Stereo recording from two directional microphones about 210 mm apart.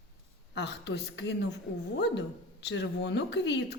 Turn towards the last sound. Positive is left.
turn(degrees=55)  # may be behind; listen again after turning